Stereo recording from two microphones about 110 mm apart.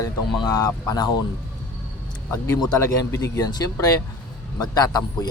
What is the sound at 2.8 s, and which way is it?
Speech, 30° left (ahead or behind).